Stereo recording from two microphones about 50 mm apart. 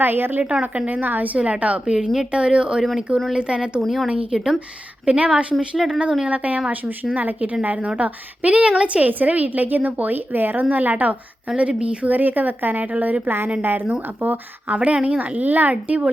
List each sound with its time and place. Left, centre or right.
0.0 s a woman's voice: right
1.8 s speech: centre
3.8 s speech: centre
5.0 s speech: right
5.5 s speech: centre
6.2 s a woman's voice: right
11.8 s speech: right
12.1 s a woman's voice: right
13.2 s a woman's voice: right
14.7 s speech: right